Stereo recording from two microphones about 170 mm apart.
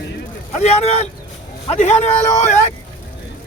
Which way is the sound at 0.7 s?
35° left (ahead or behind).